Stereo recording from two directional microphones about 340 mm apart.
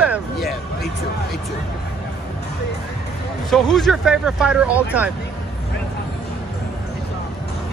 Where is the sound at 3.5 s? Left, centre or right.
Centre.